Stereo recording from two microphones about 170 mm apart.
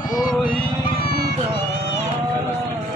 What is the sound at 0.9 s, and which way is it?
Music, 65° left (ahead or behind).